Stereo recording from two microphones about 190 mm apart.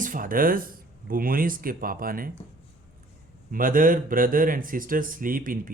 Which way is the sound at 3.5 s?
45° right (ahead or behind).